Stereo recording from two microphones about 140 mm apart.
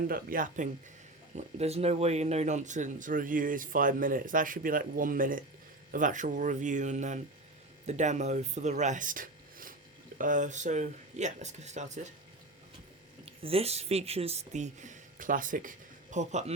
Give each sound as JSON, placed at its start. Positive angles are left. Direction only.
{"t": 0.1, "sound": "speech", "side_deg": -85}
{"t": 1.4, "sound": "speech", "side_deg": -50}
{"t": 10.2, "sound": "speech", "side_deg": -70}
{"t": 13.2, "sound": "speech", "side_deg": -45}